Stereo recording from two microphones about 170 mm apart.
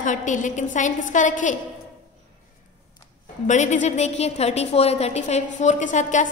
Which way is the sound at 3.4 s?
45° left (ahead or behind).